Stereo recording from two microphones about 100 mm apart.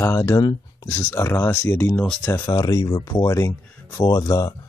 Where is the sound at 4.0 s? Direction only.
45° left (ahead or behind).